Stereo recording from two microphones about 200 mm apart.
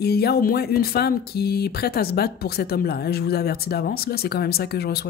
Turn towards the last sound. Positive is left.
turn(degrees=50)  # may be behind; listen again after turning